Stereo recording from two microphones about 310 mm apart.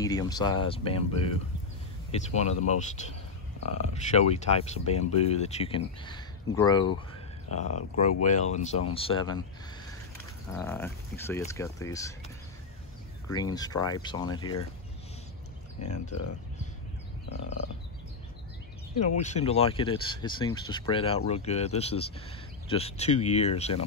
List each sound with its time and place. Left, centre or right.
0.0 s speech: centre
3.8 s speech: left
10.5 s speech: centre
13.3 s speech: centre
15.8 s speech: left
19.2 s speech: left